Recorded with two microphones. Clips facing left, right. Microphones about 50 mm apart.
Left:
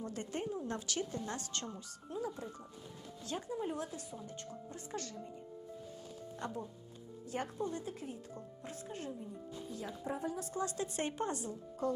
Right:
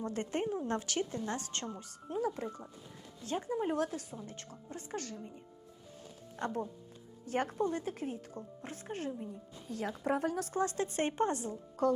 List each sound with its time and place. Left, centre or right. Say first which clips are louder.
0.0 s a woman's voice: right 5 dB; right
1.1 s speech: right 3 dB; right
2.1 s speech: right 6 dB; right
3.2 s a woman's voice: right 5 dB; right
6.4 s a woman's voice: right 7 dB; right
9.6 s a woman's voice: right 8 dB; right
10.6 s a woman's voice: right 5 dB; right
11.8 s a woman's voice: right 6 dB; right